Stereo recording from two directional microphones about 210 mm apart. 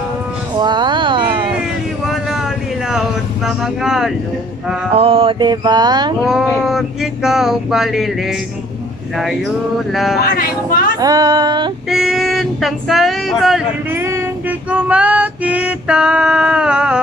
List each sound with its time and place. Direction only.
0.6 s a sound: 20° right (ahead or behind)
2.9 s vehicle: centre (ahead or behind)
4.9 s mantra: 25° right (ahead or behind)
6.2 s a sound: centre (ahead or behind)
10.2 s speech: 45° left (ahead or behind)
11.0 s a sound: 15° right (ahead or behind)
11.9 s female singing: centre (ahead or behind)
13.9 s child singing: 10° right (ahead or behind)
14.7 s female singing: 5° right (ahead or behind)